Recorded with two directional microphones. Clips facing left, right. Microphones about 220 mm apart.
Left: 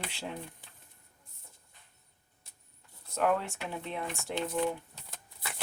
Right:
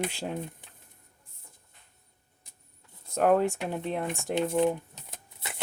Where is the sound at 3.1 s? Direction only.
45° right (ahead or behind).